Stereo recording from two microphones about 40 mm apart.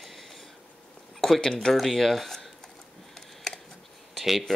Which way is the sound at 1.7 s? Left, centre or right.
Centre.